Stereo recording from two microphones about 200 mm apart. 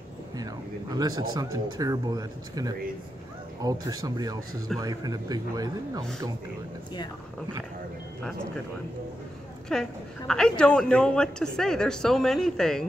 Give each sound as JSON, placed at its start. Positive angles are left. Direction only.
{"t": 0.4, "sound": "a sound", "side_deg": -20}
{"t": 1.3, "sound": "a man's voice", "side_deg": -20}
{"t": 9.7, "sound": "a woman's voice", "side_deg": 5}